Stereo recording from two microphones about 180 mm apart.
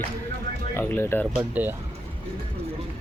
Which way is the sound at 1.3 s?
10° right (ahead or behind).